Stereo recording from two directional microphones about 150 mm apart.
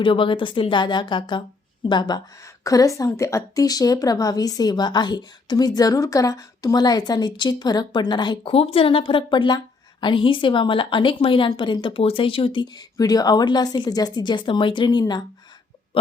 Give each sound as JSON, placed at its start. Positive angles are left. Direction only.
{"t": 0.0, "sound": "a woman's voice", "side_deg": 35}